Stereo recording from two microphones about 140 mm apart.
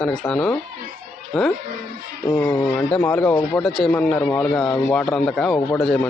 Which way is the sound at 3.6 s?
Centre (ahead or behind).